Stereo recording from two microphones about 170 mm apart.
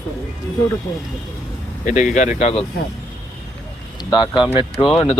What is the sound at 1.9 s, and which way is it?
Speech, 45° left (ahead or behind).